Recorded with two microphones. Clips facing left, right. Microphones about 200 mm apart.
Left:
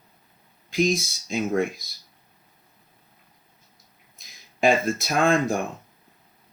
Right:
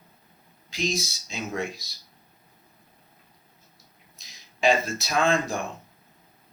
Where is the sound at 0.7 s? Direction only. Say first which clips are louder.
Left 6 dB; 55° left (ahead or behind).